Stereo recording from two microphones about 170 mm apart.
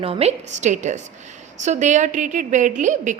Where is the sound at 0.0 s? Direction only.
35° right (ahead or behind).